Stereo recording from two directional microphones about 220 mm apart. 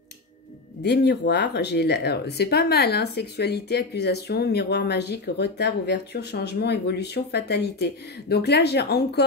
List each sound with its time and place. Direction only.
0.8 s speech: 50° left (ahead or behind)